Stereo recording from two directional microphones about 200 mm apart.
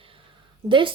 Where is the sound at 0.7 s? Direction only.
25° right (ahead or behind).